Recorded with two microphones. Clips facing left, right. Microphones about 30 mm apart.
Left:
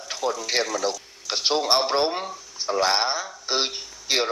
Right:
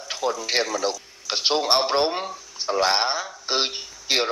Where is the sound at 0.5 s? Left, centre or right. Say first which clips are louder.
Right 1 dB; centre.